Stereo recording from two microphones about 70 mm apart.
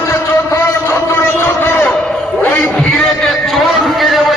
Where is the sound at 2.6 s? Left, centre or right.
Centre.